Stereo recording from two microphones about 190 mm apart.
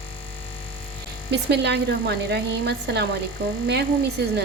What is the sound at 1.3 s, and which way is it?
A woman's voice, 65° right (ahead or behind).